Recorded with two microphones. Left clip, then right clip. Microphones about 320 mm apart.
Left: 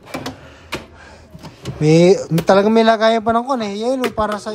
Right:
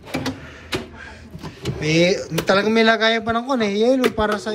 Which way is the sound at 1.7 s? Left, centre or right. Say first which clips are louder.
Left 6 dB; centre.